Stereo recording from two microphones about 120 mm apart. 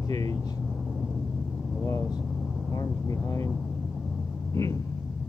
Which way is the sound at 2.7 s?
25° left (ahead or behind).